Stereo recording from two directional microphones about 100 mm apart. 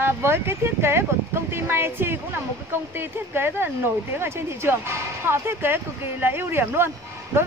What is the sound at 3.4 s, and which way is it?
Speech, 20° right (ahead or behind).